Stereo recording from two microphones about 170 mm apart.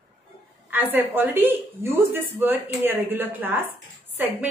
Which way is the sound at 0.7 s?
10° right (ahead or behind).